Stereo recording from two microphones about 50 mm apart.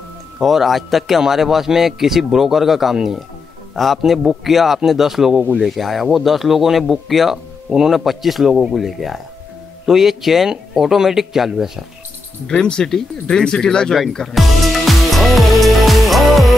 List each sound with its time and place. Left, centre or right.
0.4 s speech: centre
12.4 s speech: centre
14.1 s music: centre